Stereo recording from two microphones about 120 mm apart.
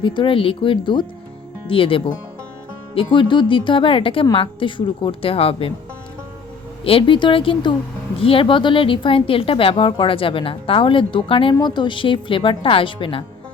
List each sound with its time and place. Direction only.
0.0 s speech: 45° left (ahead or behind)
6.8 s speech: 50° left (ahead or behind)